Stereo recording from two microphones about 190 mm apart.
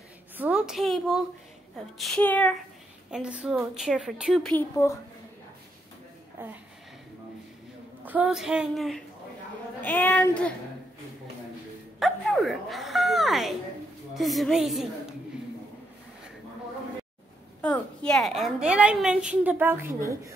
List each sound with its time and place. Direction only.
0.4 s a woman's voice: 5° right (ahead or behind)
3.1 s a woman's voice: 5° right (ahead or behind); by 4.9 s 15° left (ahead or behind)
6.4 s a woman's voice: 10° right (ahead or behind)
8.0 s a woman's voice: 10° right (ahead or behind)
12.0 s a woman's voice: centre (ahead or behind)
17.6 s a woman's voice: 5° left (ahead or behind); by 20.3 s 15° right (ahead or behind)